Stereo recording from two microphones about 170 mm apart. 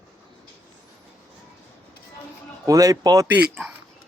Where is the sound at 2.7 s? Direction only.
20° right (ahead or behind).